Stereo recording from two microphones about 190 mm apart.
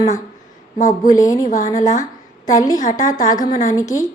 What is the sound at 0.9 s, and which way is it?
Speech, 15° left (ahead or behind).